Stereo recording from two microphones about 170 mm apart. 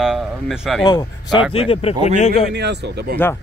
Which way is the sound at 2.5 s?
85° right.